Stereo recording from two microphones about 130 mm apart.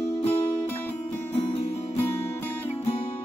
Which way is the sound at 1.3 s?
50° left (ahead or behind).